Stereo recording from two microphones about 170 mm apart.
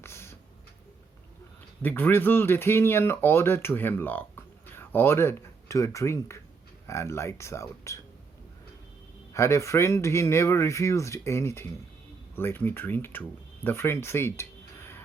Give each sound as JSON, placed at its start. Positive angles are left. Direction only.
{"t": 0.0, "sound": "a sound", "side_deg": 15}
{"t": 1.8, "sound": "speech", "side_deg": 10}
{"t": 9.3, "sound": "speech", "side_deg": 15}